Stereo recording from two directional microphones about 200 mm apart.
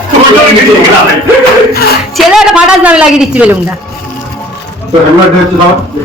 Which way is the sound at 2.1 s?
5° right (ahead or behind).